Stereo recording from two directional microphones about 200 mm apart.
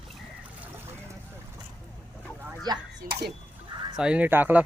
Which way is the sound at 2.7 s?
20° right (ahead or behind).